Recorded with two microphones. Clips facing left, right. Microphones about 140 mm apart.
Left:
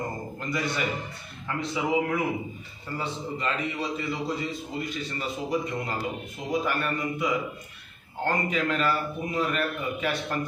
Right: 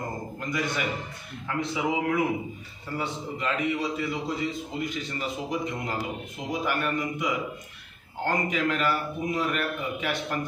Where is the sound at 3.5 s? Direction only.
15° right (ahead or behind).